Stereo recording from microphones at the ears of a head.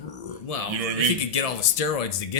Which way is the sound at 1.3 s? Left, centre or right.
Left.